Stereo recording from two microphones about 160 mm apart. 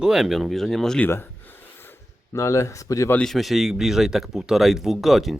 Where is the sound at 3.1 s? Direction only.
5° left (ahead or behind).